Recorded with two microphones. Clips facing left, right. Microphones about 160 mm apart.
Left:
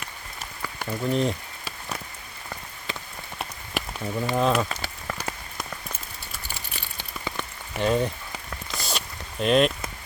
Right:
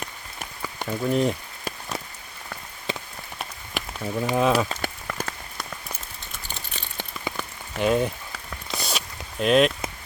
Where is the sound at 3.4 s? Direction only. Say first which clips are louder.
Left 1 dB; centre (ahead or behind).